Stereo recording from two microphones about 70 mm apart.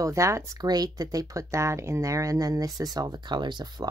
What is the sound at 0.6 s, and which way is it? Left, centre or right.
Speech, right.